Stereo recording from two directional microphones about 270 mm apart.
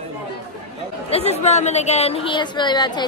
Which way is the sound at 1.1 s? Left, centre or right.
Left.